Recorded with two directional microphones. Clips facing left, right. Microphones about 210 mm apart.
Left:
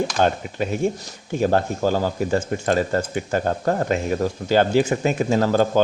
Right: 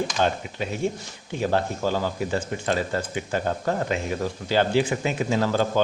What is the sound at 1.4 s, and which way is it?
A man's voice, 45° left (ahead or behind).